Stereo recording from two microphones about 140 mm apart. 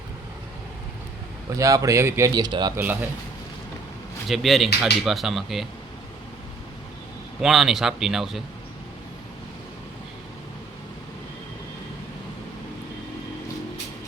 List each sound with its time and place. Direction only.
1.5 s speech: 25° right (ahead or behind)
2.7 s speech: 15° right (ahead or behind)
4.3 s speech: centre (ahead or behind)
7.4 s speech: 5° right (ahead or behind)